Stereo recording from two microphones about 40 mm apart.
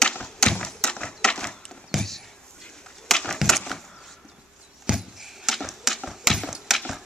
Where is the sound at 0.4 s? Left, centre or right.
Centre.